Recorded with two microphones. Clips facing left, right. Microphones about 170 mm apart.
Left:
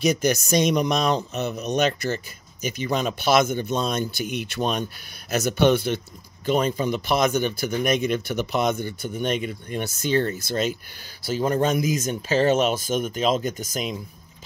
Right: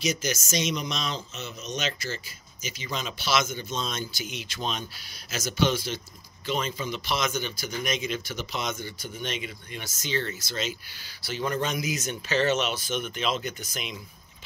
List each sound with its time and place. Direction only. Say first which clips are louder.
0.0 s a man's voice: left 8 dB; 55° left (ahead or behind)
11.2 s a man's voice: left 7 dB; 40° left (ahead or behind)